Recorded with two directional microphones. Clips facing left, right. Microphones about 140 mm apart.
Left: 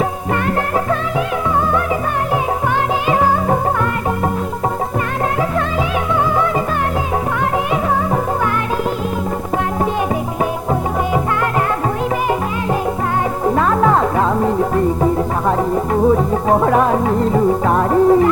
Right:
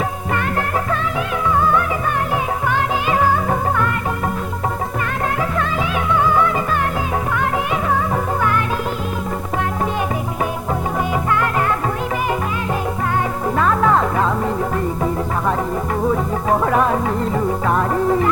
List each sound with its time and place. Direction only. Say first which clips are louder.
3.1 s music: left 3 dB; 30° left (ahead or behind)
6.2 s music: even; 25° left (ahead or behind)
13.4 s music: left 3 dB; 30° left (ahead or behind)